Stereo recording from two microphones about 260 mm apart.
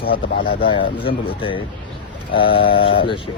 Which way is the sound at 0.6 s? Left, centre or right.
Centre.